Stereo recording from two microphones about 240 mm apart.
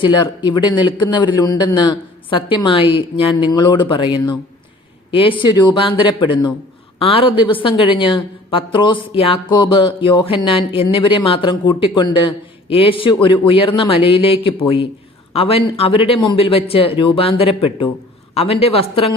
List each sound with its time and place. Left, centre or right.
0.0 s a woman's voice: centre